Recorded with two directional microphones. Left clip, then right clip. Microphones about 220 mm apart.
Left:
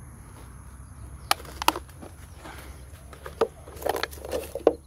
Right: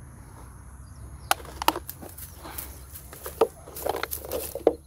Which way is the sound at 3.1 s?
15° right (ahead or behind).